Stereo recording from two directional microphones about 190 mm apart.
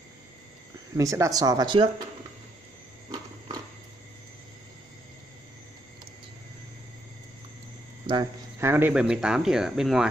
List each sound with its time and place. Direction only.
0.9 s speech: 15° right (ahead or behind)
3.1 s a sound: 20° right (ahead or behind)
8.1 s speech: 20° right (ahead or behind); by 10.0 s centre (ahead or behind)